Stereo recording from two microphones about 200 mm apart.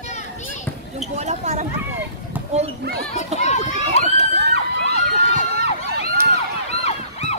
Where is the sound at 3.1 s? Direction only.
35° left (ahead or behind).